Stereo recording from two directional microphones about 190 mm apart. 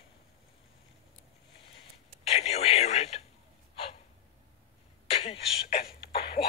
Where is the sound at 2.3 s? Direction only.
35° left (ahead or behind).